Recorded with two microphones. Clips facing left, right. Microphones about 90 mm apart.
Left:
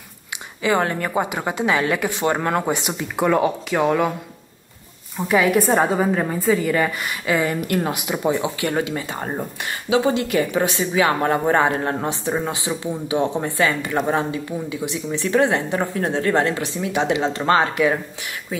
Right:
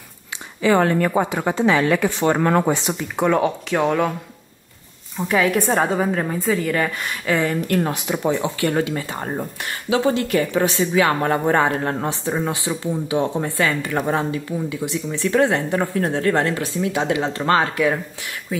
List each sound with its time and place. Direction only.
0.6 s a woman's voice: 15° left (ahead or behind)
5.1 s a woman's voice: 5° left (ahead or behind)